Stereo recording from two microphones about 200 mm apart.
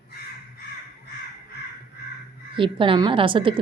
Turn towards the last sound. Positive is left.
turn(degrees=-25)  # may be behind; listen again after turning